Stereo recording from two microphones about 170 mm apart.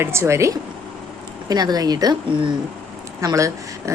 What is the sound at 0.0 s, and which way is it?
A woman's voice, 15° right (ahead or behind).